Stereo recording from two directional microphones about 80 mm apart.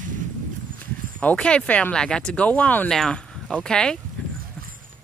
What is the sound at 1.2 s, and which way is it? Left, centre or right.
Speech, centre.